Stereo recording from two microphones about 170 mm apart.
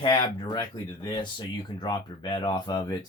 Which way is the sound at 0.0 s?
25° left (ahead or behind).